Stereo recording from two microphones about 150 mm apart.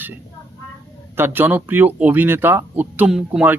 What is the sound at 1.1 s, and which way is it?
Speech, 15° right (ahead or behind).